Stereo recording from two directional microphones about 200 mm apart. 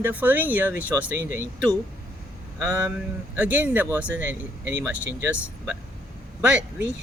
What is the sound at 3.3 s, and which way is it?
Speech, 10° right (ahead or behind).